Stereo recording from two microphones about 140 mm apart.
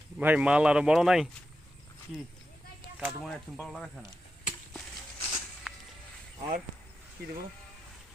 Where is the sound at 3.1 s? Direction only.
Centre (ahead or behind).